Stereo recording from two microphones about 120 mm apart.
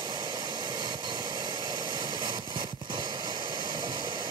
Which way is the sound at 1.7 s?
35° right (ahead or behind).